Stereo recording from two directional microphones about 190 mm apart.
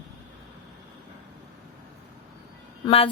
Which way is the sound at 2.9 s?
30° left (ahead or behind).